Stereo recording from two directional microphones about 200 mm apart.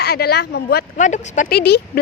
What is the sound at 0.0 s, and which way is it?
Speech, 55° left (ahead or behind).